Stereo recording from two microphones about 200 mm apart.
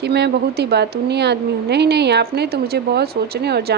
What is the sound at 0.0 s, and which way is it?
A woman's voice, 55° right (ahead or behind).